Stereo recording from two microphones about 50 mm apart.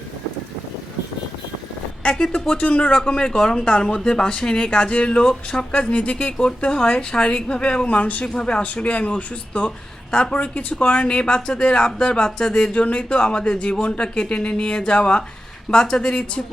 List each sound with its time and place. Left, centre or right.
2.0 s speech: centre